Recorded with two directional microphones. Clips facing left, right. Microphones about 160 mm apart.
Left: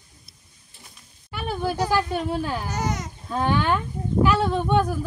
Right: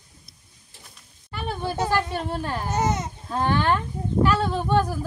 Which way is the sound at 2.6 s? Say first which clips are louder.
Right 3 dB; 25° right (ahead or behind).